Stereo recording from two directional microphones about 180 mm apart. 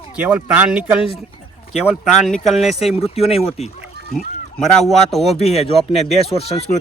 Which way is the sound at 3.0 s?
35° left (ahead or behind).